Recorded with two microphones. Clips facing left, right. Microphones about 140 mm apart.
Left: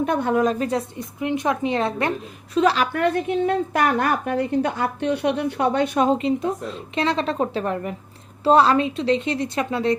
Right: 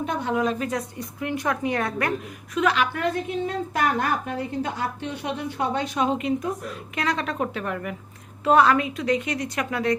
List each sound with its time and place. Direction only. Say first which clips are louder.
0.0 s speech: left 5 dB; 55° left (ahead or behind)
0.6 s a woman's voice: left 4 dB; 30° left (ahead or behind)
2.9 s a woman's voice: left 5 dB; 60° left (ahead or behind)
6.1 s a woman's voice: left 4 dB; 30° left (ahead or behind)